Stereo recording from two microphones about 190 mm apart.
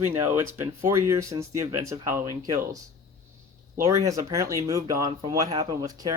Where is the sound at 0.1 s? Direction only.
10° right (ahead or behind).